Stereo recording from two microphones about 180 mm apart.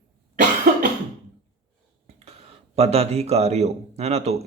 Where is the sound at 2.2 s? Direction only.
35° right (ahead or behind).